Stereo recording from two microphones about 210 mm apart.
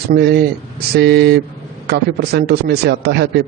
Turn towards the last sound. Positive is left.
turn(degrees=-50)  # may be behind; listen again after turning